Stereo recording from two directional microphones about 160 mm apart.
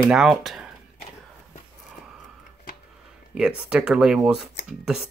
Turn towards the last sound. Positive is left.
turn(degrees=-5)  # may be behind; listen again after turning